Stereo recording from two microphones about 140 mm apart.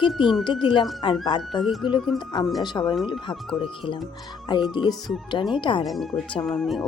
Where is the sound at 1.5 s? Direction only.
Centre (ahead or behind).